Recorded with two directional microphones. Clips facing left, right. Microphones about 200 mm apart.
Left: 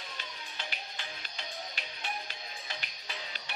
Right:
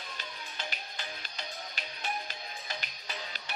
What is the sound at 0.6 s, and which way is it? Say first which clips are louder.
Music: right 2 dB; 40° right (ahead or behind).